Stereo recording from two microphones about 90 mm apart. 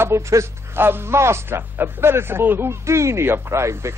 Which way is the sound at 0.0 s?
30° right (ahead or behind).